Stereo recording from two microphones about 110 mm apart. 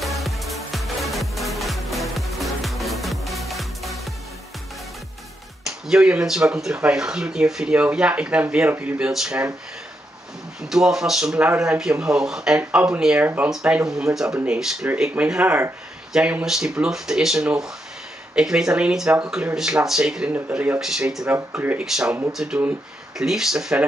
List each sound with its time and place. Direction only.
0.0 s music: centre (ahead or behind)
5.9 s speech: 5° right (ahead or behind)
10.7 s speech: 5° right (ahead or behind)
20.8 s speech: 5° right (ahead or behind)
21.3 s speech: 20° right (ahead or behind)
22.3 s speech: 5° right (ahead or behind)